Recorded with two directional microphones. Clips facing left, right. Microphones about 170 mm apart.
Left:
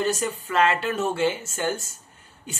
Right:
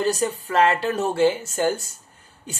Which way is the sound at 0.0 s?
35° right (ahead or behind).